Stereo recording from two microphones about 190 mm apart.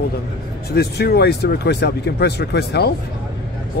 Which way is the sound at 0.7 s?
55° left (ahead or behind).